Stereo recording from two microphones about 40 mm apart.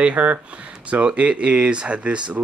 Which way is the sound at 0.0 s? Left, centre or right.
Right.